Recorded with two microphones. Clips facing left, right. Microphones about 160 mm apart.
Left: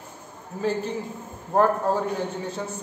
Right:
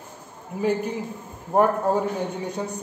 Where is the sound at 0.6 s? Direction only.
15° right (ahead or behind).